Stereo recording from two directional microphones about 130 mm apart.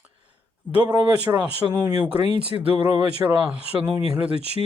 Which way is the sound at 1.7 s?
30° right (ahead or behind).